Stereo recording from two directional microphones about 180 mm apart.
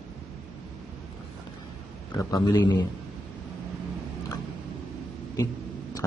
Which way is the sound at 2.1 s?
20° left (ahead or behind).